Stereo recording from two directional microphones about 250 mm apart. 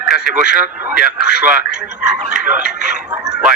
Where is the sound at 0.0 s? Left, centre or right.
Centre.